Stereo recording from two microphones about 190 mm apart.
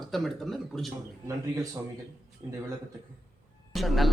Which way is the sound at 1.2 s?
20° right (ahead or behind).